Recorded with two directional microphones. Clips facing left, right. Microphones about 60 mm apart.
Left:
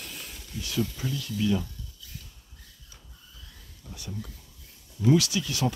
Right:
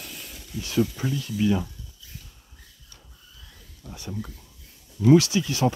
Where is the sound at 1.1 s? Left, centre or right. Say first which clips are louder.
Right 3 dB; right.